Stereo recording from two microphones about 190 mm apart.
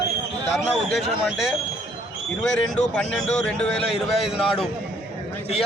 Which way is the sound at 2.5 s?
5° left (ahead or behind).